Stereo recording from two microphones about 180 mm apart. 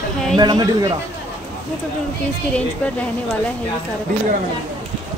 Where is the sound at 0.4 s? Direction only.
20° right (ahead or behind).